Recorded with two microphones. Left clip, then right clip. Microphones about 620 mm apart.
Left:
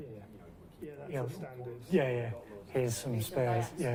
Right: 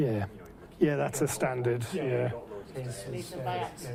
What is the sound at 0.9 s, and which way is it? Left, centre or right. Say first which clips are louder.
Speech: right 10 dB; right.